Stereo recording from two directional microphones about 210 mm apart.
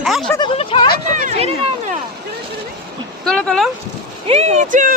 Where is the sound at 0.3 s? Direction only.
25° left (ahead or behind).